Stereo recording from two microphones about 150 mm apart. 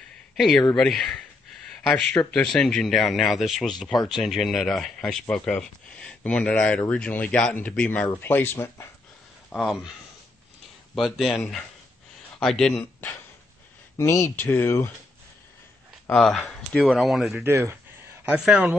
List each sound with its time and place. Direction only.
0.4 s speech: centre (ahead or behind)
9.5 s speech: centre (ahead or behind)
11.0 s speech: centre (ahead or behind)
13.9 s speech: 20° left (ahead or behind)
16.1 s speech: centre (ahead or behind)
17.4 s speech: 20° right (ahead or behind)
18.2 s speech: 5° right (ahead or behind)